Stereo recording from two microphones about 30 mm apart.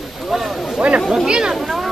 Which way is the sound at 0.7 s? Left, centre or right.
Right.